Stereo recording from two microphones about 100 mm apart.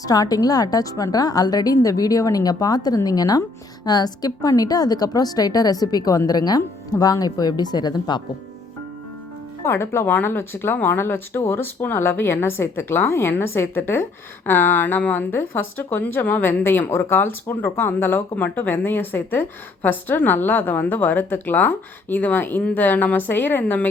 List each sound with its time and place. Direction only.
0.0 s a woman's voice: 35° left (ahead or behind)
9.6 s speech: 25° left (ahead or behind)